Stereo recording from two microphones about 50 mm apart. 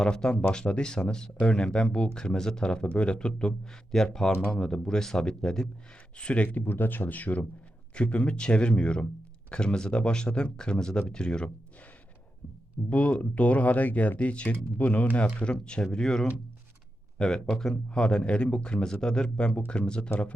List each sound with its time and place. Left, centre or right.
0.0 s speech: centre
6.6 s speech: left; by 11.5 s centre
12.9 s speech: left